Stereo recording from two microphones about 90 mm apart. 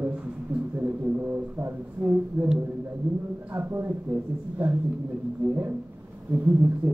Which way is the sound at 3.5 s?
25° right (ahead or behind).